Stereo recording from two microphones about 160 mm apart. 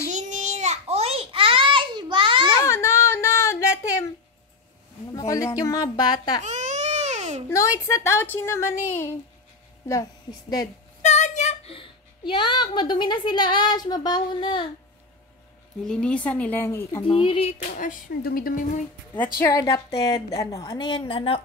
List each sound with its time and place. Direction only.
0.1 s a sound: 45° right (ahead or behind); by 2.4 s 30° right (ahead or behind)
2.6 s a sound: 20° left (ahead or behind)
5.1 s a woman's voice: 20° left (ahead or behind)
6.4 s baby cry: 45° right (ahead or behind)
7.4 s a woman's voice: 20° left (ahead or behind)
11.0 s a child's voice: 45° left (ahead or behind); by 14.7 s 30° left (ahead or behind)
15.8 s speech: 5° left (ahead or behind)
17.0 s speech: 30° left (ahead or behind)
17.6 s speech: 55° left (ahead or behind)
19.4 s a woman's voice: 20° left (ahead or behind)